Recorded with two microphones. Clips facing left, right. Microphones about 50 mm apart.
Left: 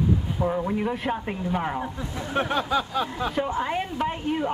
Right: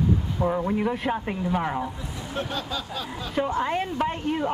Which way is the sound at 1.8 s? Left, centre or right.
Left.